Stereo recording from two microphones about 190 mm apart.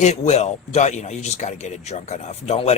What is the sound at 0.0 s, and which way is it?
A man's voice, 35° left (ahead or behind).